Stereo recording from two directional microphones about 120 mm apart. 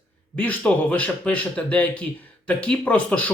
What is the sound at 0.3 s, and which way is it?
Speech, 10° left (ahead or behind).